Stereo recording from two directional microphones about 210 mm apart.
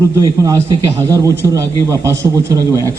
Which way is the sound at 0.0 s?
15° right (ahead or behind).